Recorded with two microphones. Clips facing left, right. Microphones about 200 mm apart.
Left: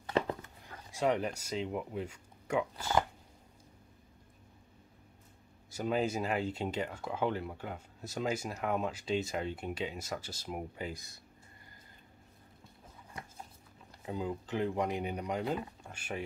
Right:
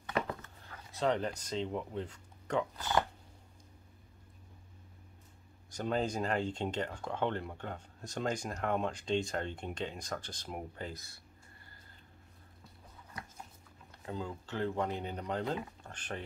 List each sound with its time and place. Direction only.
0.0 s a sound: 30° left (ahead or behind)
0.4 s speech: 10° left (ahead or behind)
5.7 s speech: 5° left (ahead or behind)
14.0 s speech: 15° left (ahead or behind)